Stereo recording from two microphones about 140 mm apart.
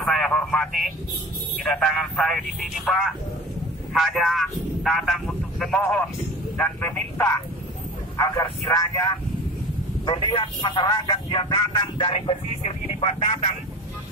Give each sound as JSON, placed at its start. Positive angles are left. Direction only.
{"t": 0.0, "sound": "a sound", "side_deg": 5}
{"t": 1.6, "sound": "speech", "side_deg": 5}
{"t": 6.5, "sound": "speech", "side_deg": 10}
{"t": 8.2, "sound": "a man's voice", "side_deg": 25}